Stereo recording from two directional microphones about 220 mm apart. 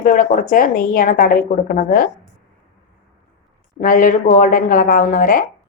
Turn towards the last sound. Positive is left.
turn(degrees=40)  # may be behind; listen again after turning